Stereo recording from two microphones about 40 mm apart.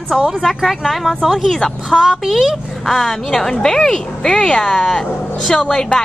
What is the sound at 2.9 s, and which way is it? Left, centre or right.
Speech, centre.